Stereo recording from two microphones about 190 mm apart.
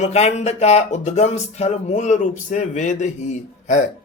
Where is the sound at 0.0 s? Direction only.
35° left (ahead or behind).